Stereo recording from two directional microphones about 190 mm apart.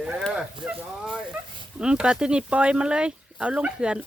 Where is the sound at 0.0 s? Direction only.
5° right (ahead or behind).